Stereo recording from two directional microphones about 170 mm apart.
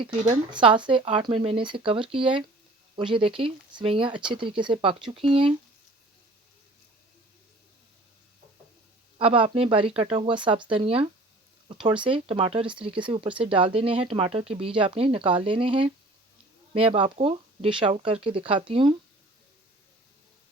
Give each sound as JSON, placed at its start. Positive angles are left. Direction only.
{"t": 0.5, "sound": "speech", "side_deg": -30}
{"t": 9.1, "sound": "speech", "side_deg": -30}